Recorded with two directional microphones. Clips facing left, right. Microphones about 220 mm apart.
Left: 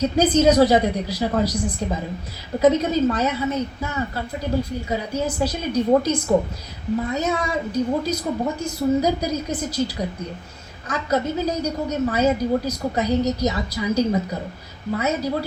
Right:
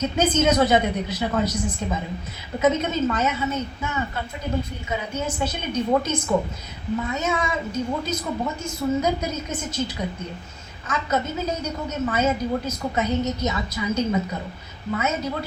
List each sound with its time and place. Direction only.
0.0 s a woman's voice: 35° left (ahead or behind)